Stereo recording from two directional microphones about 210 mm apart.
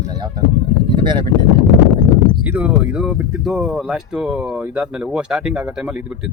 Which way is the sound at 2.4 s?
5° right (ahead or behind).